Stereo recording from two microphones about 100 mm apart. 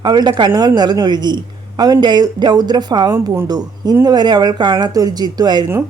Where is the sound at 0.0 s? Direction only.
45° right (ahead or behind).